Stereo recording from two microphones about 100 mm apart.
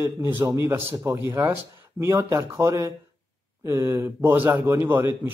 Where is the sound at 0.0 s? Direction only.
25° right (ahead or behind).